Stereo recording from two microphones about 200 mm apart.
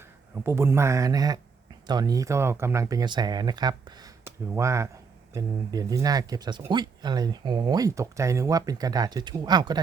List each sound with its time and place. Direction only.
0.4 s speech: 10° right (ahead or behind)